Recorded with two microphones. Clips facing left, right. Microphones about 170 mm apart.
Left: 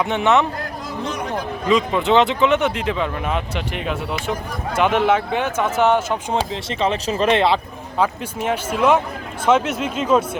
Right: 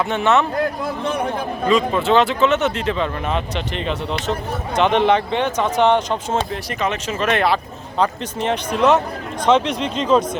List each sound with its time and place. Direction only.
0.0 s speech: 15° left (ahead or behind)
0.8 s a sound: 55° right (ahead or behind)
1.7 s speech: 15° left (ahead or behind)
6.5 s speech: 25° left (ahead or behind)
7.9 s speech: 10° left (ahead or behind)